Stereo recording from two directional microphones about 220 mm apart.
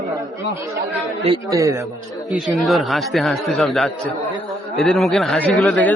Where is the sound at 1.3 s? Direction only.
15° right (ahead or behind).